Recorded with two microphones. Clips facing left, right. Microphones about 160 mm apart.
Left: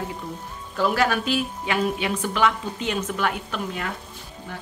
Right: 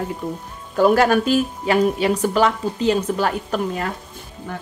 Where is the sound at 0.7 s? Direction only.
45° right (ahead or behind).